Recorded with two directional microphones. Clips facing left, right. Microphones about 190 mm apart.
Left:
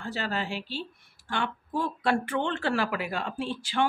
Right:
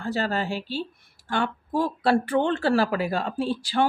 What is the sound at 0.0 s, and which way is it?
Speech, 40° right (ahead or behind).